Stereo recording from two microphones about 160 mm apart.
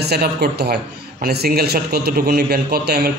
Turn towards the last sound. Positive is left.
turn(degrees=-75)  # may be behind; listen again after turning